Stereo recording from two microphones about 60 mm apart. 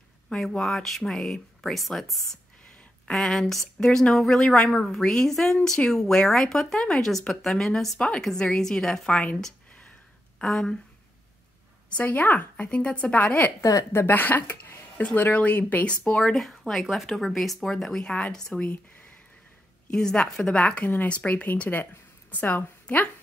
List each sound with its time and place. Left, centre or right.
0.4 s a woman's voice: centre
3.8 s a woman's voice: centre
4.1 s a woman's voice: centre
10.4 s a woman's voice: centre
12.1 s a woman's voice: left
13.6 s a woman's voice: left
14.0 s a woman's voice: left
16.3 s a woman's voice: centre; by 19.1 s left
19.9 s a woman's voice: centre; by 23.0 s left